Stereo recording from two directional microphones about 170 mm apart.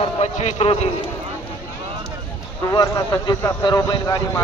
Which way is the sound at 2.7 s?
25° left (ahead or behind).